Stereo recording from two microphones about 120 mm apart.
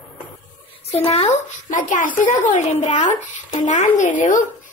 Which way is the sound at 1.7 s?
90° left.